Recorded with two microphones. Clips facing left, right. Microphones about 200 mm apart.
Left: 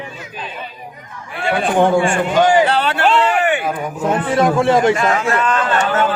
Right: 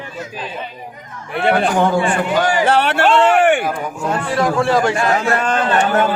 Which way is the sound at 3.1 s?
50° right (ahead or behind).